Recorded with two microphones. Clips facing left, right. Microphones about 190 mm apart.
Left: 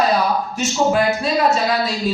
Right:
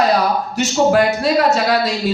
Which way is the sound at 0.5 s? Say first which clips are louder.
Right 5 dB; 70° right (ahead or behind).